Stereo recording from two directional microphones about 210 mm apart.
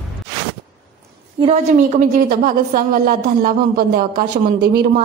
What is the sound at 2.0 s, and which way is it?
Speech, 40° right (ahead or behind).